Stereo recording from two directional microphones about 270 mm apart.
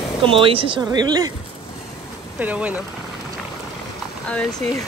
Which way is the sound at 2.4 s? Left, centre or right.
Centre.